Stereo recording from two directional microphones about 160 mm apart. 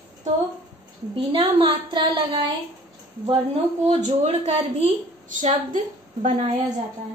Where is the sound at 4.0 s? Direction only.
45° right (ahead or behind).